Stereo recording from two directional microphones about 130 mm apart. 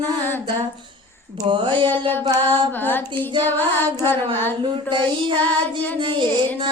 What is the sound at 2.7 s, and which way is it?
Carnatic music, 15° left (ahead or behind).